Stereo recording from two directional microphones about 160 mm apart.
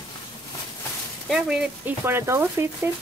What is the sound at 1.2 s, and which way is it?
Speech, centre (ahead or behind).